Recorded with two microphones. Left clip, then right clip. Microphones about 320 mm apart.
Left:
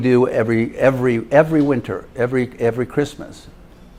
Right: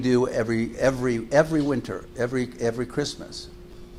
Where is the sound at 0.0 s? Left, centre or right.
Left.